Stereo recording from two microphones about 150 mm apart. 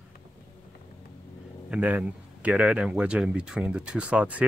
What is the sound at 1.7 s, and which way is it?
Speech, 10° right (ahead or behind).